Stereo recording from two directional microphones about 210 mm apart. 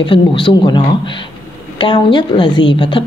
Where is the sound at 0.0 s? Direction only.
25° left (ahead or behind).